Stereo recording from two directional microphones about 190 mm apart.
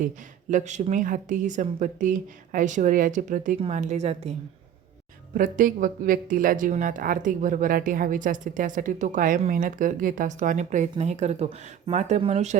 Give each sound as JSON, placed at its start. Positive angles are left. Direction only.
{"t": 0.5, "sound": "speech", "side_deg": -40}